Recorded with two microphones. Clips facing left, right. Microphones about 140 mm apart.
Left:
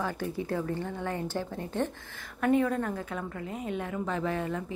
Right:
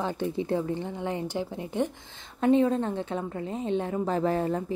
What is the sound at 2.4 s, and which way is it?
A woman's voice, 25° right (ahead or behind).